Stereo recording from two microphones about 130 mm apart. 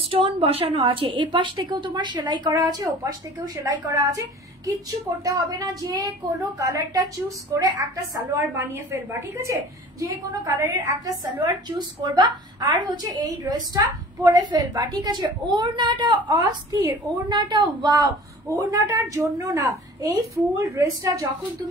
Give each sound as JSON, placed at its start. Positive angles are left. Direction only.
{"t": 0.1, "sound": "a woman's voice", "side_deg": -45}
{"t": 9.4, "sound": "a woman's voice", "side_deg": -25}